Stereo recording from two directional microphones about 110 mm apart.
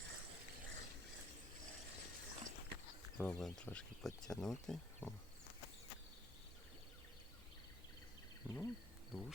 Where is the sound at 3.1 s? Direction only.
5° left (ahead or behind).